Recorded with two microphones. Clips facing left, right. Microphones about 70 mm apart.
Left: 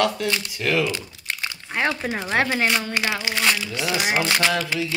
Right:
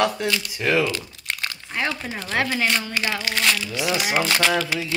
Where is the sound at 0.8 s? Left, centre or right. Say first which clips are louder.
Even; centre.